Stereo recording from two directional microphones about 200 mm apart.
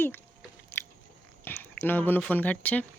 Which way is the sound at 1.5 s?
10° left (ahead or behind).